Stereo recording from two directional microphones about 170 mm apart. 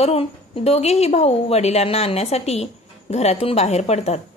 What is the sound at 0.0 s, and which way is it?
A woman's voice, 35° left (ahead or behind).